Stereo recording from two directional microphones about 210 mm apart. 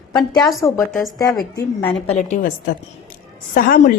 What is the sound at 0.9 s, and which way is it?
Speech, centre (ahead or behind).